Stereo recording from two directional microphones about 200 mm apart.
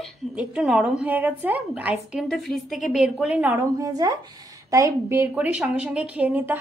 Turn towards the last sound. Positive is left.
turn(degrees=-10)  # may be behind; listen again after turning